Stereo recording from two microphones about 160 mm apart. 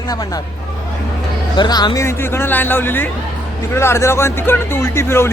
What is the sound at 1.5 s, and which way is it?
A man's voice, 25° left (ahead or behind).